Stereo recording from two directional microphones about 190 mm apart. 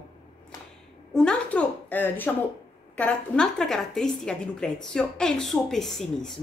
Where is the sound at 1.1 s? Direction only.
5° left (ahead or behind).